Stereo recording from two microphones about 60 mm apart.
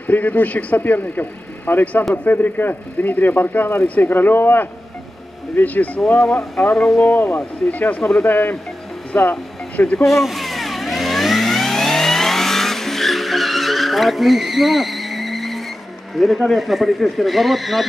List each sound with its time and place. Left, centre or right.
0.0 s speech: left
6.2 s a sound: centre
7.0 s speech: left
10.0 s vehicle: centre
16.2 s speech: centre